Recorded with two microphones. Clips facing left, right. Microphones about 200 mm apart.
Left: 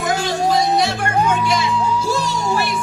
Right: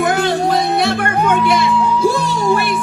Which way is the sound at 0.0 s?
60° right (ahead or behind).